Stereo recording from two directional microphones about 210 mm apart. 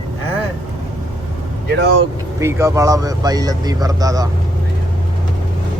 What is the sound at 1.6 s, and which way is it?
Speech, 55° right (ahead or behind).